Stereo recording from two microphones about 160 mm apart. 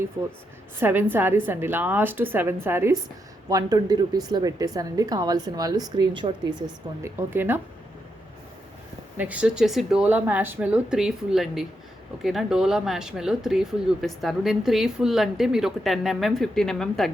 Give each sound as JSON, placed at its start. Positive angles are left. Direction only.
{"t": 0.8, "sound": "speech", "side_deg": -10}
{"t": 7.2, "sound": "speech", "side_deg": -15}
{"t": 9.1, "sound": "speech", "side_deg": -10}